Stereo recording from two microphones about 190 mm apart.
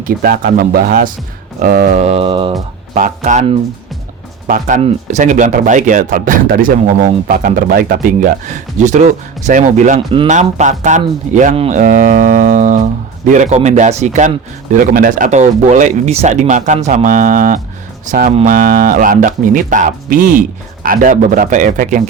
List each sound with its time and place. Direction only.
0.0 s speech: 50° right (ahead or behind); by 2.6 s 25° right (ahead or behind)
2.9 s speech: 40° right (ahead or behind)
4.4 s speech: 45° right (ahead or behind)
4.8 s speech: 35° right (ahead or behind)